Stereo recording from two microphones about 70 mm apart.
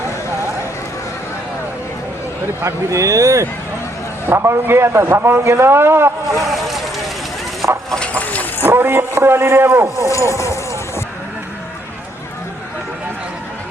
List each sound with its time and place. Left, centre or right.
2.6 s a man's voice: right
6.4 s vehicle: centre
7.9 s clip-clop: centre
8.1 s dog: left
8.6 s speech: right
10.2 s clip-clop: left